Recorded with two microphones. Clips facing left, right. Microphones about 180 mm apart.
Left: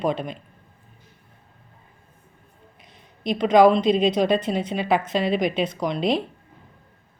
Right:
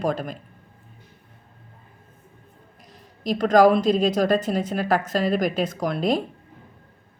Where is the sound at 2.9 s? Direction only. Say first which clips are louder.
Even; 40° right (ahead or behind).